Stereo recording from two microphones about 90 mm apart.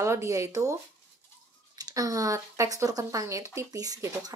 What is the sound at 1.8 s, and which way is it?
Speech, 40° right (ahead or behind).